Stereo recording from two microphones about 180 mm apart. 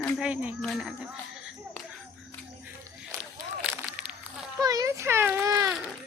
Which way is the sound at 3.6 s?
5° right (ahead or behind).